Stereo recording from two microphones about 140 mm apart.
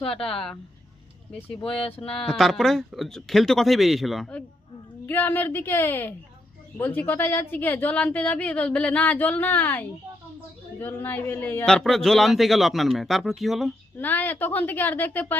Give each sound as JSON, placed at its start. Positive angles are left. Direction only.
{"t": 0.1, "sound": "a man's voice", "side_deg": 5}
{"t": 2.1, "sound": "a man's voice", "side_deg": 5}
{"t": 13.9, "sound": "a woman's voice", "side_deg": 15}